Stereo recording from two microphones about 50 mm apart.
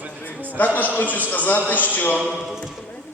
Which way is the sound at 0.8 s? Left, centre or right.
Left.